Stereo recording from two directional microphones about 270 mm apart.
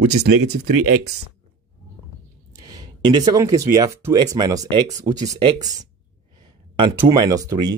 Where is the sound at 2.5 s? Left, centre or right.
Centre.